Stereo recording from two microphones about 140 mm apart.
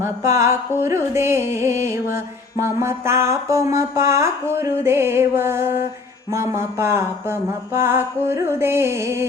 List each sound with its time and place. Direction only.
0.0 s music: 20° right (ahead or behind)